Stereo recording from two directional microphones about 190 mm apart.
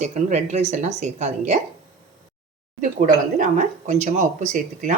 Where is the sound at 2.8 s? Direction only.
45° right (ahead or behind).